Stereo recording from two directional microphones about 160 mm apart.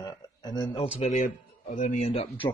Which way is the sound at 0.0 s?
25° left (ahead or behind).